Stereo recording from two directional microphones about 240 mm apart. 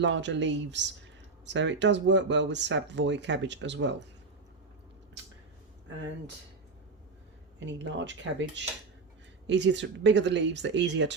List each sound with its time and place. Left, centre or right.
0.0 s speech: right
7.6 s speech: right